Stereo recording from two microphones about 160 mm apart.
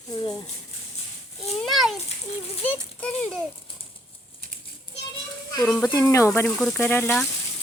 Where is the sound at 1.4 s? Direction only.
Centre (ahead or behind).